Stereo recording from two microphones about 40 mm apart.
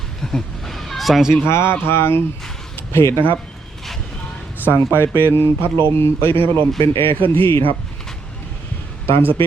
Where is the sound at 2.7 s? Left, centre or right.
Left.